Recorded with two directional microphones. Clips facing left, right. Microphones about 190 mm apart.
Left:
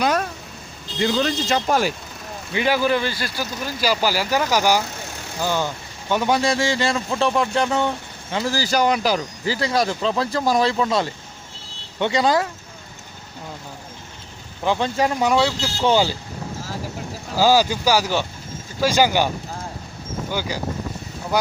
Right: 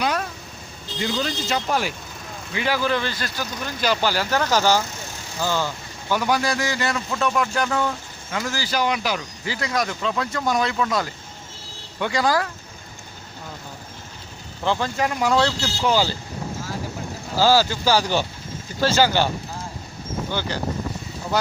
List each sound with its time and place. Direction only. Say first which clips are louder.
1.2 s speech: left 4 dB; 45° left (ahead or behind)
2.6 s speech: left 3 dB; 15° left (ahead or behind)
14.6 s speech: left 2 dB; 15° left (ahead or behind)
14.9 s speech: left 3 dB; 30° left (ahead or behind)
15.3 s speech: left 1 dB; 10° left (ahead or behind)
15.8 s speech: left 3 dB; 25° left (ahead or behind)
17.3 s speech: left 1 dB; 15° left (ahead or behind)
18.8 s speech: left 1 dB; 15° left (ahead or behind)
20.3 s speech: left 2 dB; 10° left (ahead or behind)